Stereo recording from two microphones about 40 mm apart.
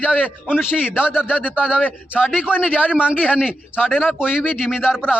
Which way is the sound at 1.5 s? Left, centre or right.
Right.